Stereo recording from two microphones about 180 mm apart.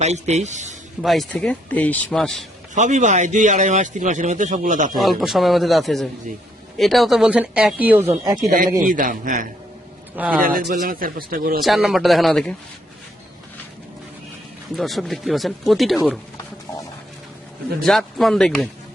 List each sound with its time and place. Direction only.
0.0 s a man's voice: 35° right (ahead or behind)
1.0 s a man's voice: centre (ahead or behind)
2.7 s speech: 40° right (ahead or behind)
4.9 s a man's voice: centre (ahead or behind)
8.8 s speech: 50° right (ahead or behind)
10.2 s a man's voice: 10° right (ahead or behind)
10.4 s speech: 50° right (ahead or behind)
11.6 s a man's voice: centre (ahead or behind)
14.8 s a man's voice: centre (ahead or behind)
17.8 s a man's voice: centre (ahead or behind)